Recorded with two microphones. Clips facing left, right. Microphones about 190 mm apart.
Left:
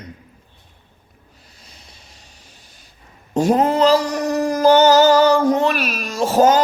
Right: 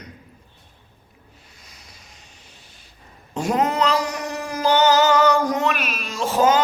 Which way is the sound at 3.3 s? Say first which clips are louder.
Left 6 dB; 35° left (ahead or behind).